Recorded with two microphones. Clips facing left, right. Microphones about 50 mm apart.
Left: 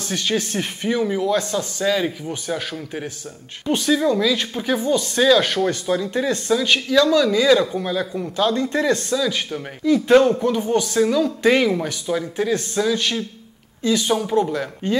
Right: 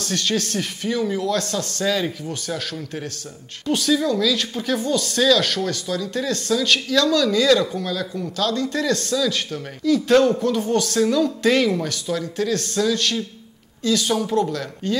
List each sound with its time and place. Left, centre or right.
0.0 s speech: centre